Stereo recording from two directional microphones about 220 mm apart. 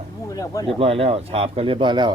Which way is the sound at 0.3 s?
15° left (ahead or behind).